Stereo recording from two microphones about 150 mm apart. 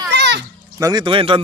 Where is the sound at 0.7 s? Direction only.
20° right (ahead or behind).